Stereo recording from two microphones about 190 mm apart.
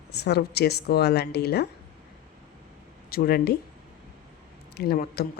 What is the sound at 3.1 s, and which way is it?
Speech, 50° left (ahead or behind).